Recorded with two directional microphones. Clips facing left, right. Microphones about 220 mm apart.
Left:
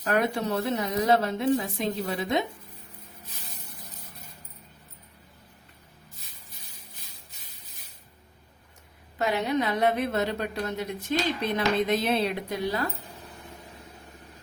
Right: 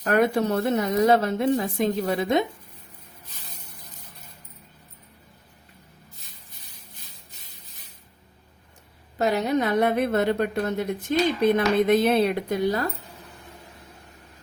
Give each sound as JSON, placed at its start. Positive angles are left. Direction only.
{"t": 0.0, "sound": "a woman's voice", "side_deg": -50}
{"t": 9.1, "sound": "a woman's voice", "side_deg": -40}